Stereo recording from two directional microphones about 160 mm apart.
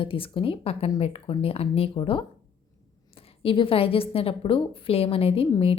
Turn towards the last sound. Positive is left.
turn(degrees=35)  # may be behind; listen again after turning